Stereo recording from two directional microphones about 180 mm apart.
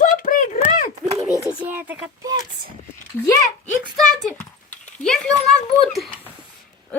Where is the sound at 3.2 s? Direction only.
15° left (ahead or behind).